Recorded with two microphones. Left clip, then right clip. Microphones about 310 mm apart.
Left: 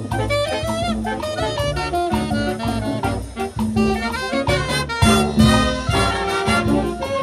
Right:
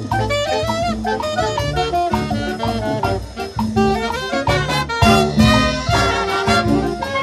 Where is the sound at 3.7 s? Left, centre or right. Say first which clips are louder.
Right 4 dB; centre.